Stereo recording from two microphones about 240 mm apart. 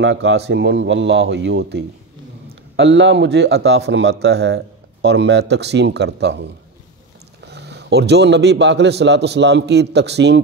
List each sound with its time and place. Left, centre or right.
0.0 s a man's voice: right